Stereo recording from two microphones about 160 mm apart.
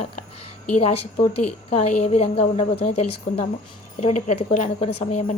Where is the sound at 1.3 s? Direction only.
40° left (ahead or behind).